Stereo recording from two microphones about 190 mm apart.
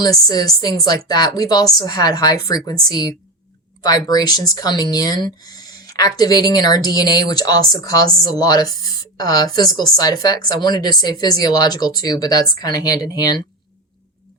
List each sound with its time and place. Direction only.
0.0 s speech: 20° left (ahead or behind)